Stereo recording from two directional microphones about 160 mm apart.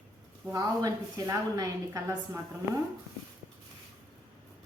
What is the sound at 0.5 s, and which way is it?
A woman's voice, 20° right (ahead or behind).